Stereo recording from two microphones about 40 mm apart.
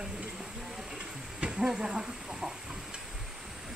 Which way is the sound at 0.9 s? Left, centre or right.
Right.